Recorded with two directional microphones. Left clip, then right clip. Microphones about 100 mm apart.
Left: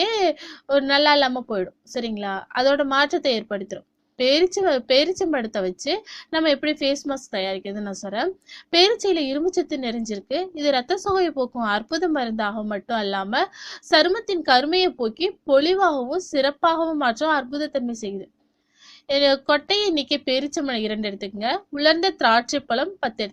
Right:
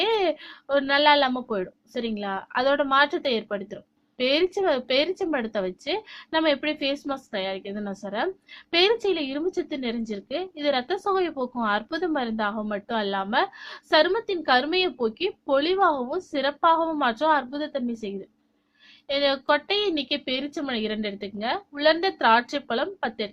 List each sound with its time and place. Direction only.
0.0 s a woman's voice: 30° left (ahead or behind)
7.3 s a woman's voice: 40° left (ahead or behind)